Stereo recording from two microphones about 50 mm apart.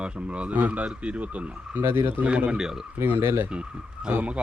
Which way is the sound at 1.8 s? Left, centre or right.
Right.